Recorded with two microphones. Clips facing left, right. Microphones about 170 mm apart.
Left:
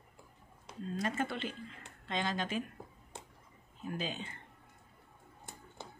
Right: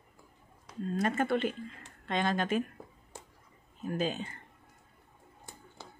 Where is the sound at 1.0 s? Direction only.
55° right (ahead or behind).